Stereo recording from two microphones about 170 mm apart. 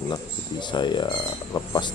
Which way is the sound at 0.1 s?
25° left (ahead or behind).